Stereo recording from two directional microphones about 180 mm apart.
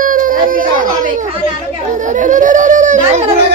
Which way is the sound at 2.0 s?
45° right (ahead or behind).